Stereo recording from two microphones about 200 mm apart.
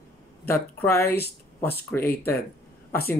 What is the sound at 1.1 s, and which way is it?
Speech, 50° left (ahead or behind).